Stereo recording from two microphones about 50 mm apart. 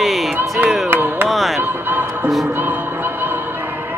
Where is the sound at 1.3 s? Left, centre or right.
Centre.